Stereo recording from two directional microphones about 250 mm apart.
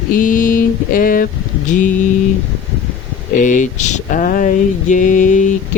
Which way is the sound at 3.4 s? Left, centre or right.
Left.